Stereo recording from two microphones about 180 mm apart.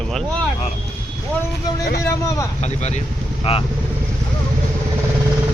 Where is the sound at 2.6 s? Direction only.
40° left (ahead or behind).